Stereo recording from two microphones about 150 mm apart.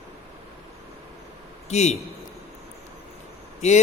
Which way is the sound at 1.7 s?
45° left (ahead or behind).